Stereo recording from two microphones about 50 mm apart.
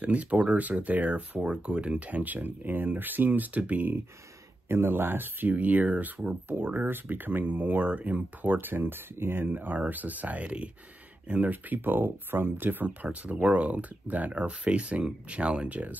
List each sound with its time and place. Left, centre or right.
0.0 s speech: right
1.4 s speech: right
4.6 s speech: right